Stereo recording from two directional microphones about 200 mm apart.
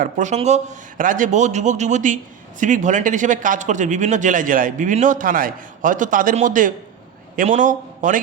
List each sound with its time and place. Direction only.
0.0 s a man's voice: 35° right (ahead or behind)